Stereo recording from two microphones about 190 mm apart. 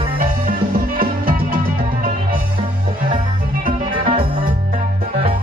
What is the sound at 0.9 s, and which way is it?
Music, 50° right (ahead or behind).